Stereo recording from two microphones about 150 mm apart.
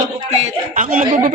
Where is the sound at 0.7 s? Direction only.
65° right (ahead or behind).